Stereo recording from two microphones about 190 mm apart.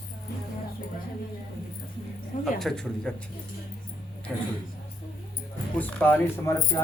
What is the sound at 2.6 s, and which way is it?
Speech, centre (ahead or behind).